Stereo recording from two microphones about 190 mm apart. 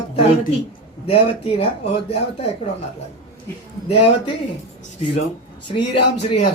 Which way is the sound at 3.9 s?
30° left (ahead or behind).